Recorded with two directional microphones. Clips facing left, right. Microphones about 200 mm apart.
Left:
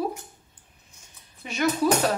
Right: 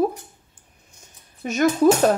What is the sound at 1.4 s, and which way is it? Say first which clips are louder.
Speech: right 6 dB; 45° right (ahead or behind).